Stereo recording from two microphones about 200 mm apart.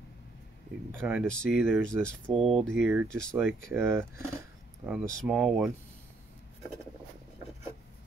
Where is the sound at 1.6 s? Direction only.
10° right (ahead or behind).